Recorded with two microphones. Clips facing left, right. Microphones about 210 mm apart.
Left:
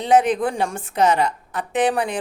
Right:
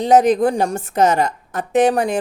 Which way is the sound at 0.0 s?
40° right (ahead or behind).